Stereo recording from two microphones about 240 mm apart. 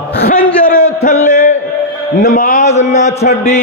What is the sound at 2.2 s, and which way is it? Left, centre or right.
Speech, left.